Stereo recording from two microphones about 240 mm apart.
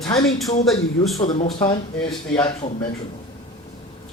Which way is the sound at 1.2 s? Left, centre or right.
Left.